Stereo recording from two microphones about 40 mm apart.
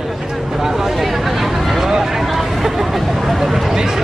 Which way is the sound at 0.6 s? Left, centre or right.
Centre.